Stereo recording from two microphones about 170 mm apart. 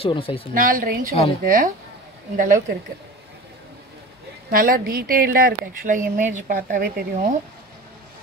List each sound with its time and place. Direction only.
0.0 s a woman's voice: 30° left (ahead or behind)
0.6 s a woman's voice: 55° right (ahead or behind)
4.5 s a woman's voice: 60° right (ahead or behind)